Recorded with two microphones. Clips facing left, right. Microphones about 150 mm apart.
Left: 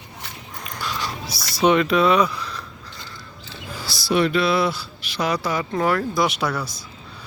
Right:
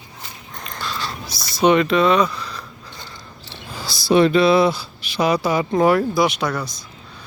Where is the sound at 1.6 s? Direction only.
5° left (ahead or behind).